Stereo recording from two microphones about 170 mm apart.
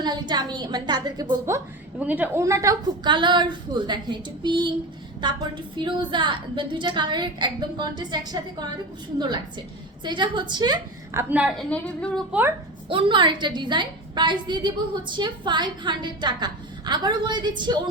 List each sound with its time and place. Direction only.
0.0 s a woman's voice: 25° right (ahead or behind); by 11.6 s 5° right (ahead or behind)
11.7 s speech: 5° left (ahead or behind)
12.9 s a woman's voice: 30° right (ahead or behind)